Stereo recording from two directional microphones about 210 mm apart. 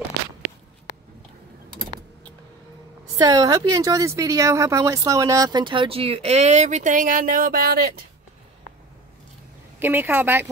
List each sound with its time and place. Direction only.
3.2 s speech: 15° right (ahead or behind); by 7.9 s 45° right (ahead or behind)
9.8 s a woman's voice: 10° right (ahead or behind)